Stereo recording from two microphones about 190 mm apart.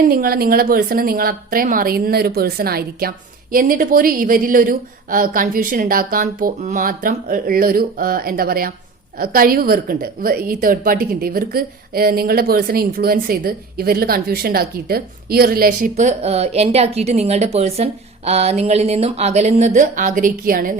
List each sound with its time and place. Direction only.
0.1 s a woman's voice: 50° right (ahead or behind)
16.0 s speech: 35° right (ahead or behind)